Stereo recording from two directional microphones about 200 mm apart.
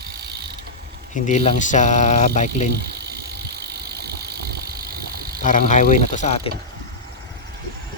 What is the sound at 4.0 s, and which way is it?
Vehicle, 55° right (ahead or behind).